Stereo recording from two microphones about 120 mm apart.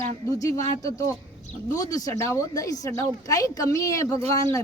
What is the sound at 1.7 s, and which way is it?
A woman's voice, 30° left (ahead or behind).